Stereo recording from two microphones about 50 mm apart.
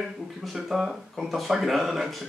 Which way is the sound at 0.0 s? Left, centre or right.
Centre.